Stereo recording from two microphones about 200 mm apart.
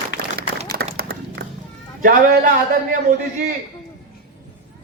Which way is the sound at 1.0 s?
50° right (ahead or behind).